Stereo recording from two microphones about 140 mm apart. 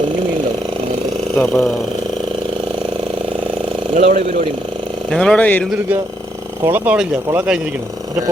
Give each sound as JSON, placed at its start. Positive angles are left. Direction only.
{"t": 1.4, "sound": "speech", "side_deg": 5}
{"t": 3.9, "sound": "speech", "side_deg": -70}
{"t": 5.1, "sound": "speech", "side_deg": 5}
{"t": 6.7, "sound": "speech", "side_deg": -10}